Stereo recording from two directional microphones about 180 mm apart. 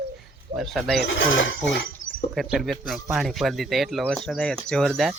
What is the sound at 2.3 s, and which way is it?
Speech, centre (ahead or behind).